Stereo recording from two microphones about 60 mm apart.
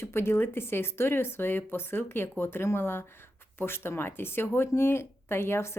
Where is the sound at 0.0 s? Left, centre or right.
Left.